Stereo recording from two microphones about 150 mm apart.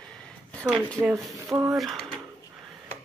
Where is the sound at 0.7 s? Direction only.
5° left (ahead or behind).